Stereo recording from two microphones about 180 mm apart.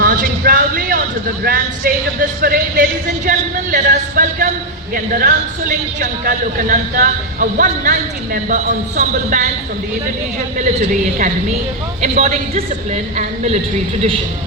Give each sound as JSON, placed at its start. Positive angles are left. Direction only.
{"t": 0.0, "sound": "a sound", "side_deg": -50}
{"t": 2.4, "sound": "a man's voice", "side_deg": -50}
{"t": 10.6, "sound": "a man's voice", "side_deg": -45}